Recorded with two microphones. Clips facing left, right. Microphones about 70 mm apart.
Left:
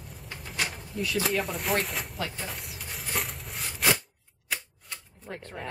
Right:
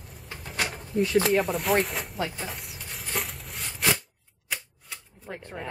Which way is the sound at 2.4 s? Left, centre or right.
Centre.